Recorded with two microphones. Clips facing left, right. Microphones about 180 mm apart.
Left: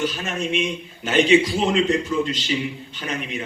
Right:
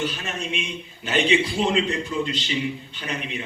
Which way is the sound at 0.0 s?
40° left (ahead or behind).